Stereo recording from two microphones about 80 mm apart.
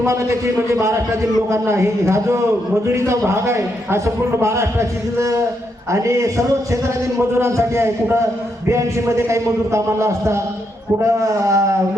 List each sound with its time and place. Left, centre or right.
0.0 s a man's voice: right